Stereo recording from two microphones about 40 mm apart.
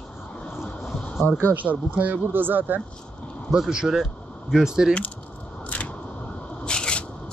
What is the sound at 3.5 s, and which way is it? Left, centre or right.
Speech, right.